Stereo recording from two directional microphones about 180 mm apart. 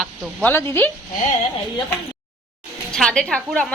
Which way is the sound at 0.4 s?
10° left (ahead or behind).